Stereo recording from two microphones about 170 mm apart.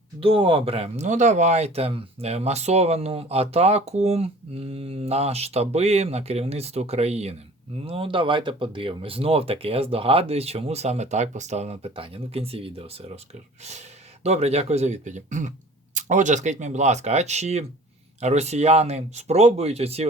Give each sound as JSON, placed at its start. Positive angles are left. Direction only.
{"t": 0.2, "sound": "speech", "side_deg": -30}
{"t": 14.3, "sound": "speech", "side_deg": -40}